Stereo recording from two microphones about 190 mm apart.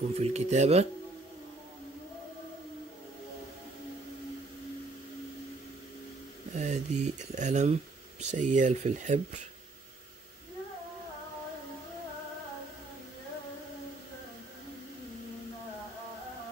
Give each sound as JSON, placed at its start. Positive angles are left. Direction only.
{"t": 0.2, "sound": "speech", "side_deg": -35}
{"t": 6.5, "sound": "speech", "side_deg": -40}